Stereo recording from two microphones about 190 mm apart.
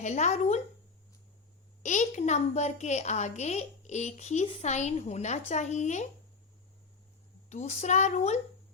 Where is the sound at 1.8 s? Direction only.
40° left (ahead or behind).